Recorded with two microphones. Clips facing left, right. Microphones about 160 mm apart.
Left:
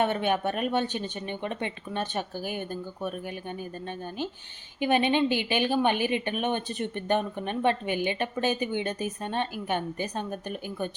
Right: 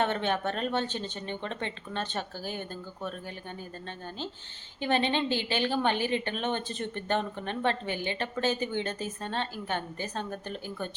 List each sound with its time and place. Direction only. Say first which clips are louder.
0.0 s a woman's voice: left 3 dB; 10° left (ahead or behind)
4.8 s a woman's voice: left 4 dB; 15° left (ahead or behind)